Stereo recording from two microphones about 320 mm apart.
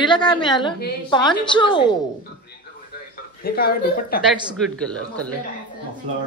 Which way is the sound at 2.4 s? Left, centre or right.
Left.